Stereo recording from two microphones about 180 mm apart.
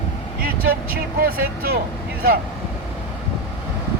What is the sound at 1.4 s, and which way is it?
Speech, 55° right (ahead or behind).